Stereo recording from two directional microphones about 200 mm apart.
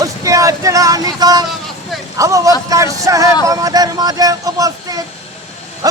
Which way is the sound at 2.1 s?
15° right (ahead or behind).